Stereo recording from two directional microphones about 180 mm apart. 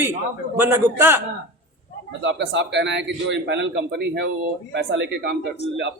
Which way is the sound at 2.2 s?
90° right.